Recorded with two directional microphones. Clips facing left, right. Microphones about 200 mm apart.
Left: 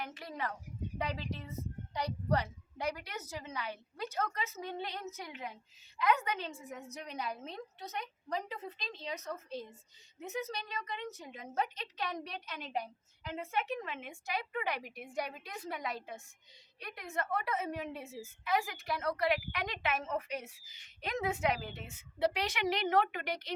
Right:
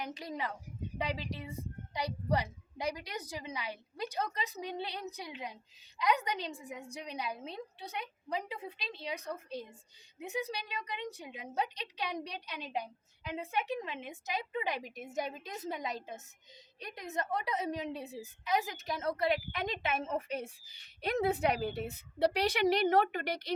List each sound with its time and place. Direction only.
0.0 s a woman's voice: 15° right (ahead or behind); by 23.4 s 35° right (ahead or behind)